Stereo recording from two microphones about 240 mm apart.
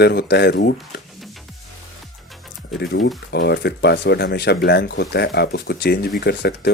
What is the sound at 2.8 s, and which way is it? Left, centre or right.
Speech, left.